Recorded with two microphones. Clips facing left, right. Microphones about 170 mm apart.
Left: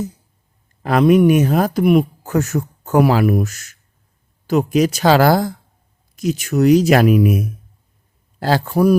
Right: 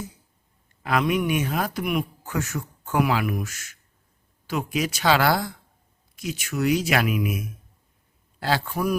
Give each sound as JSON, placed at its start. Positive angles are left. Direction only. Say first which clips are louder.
{"t": 0.8, "sound": "speech", "louder": "left 11 dB", "side_deg": 40}